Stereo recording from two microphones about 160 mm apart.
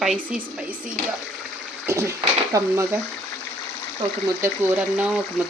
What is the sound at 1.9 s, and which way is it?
Speech, 15° right (ahead or behind).